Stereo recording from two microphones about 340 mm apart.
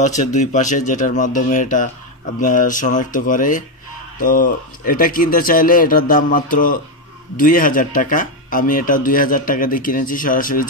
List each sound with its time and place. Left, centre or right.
0.0 s speech: left